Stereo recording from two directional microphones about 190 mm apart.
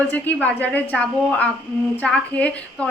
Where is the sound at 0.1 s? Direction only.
10° left (ahead or behind).